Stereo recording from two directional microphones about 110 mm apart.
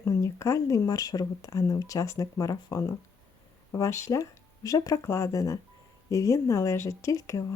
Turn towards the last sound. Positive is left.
turn(degrees=30)  # may be behind; listen again after turning